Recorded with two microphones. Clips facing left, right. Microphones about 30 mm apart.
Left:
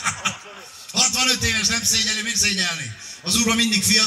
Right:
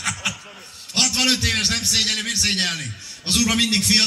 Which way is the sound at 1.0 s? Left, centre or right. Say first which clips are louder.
Right 1 dB; right.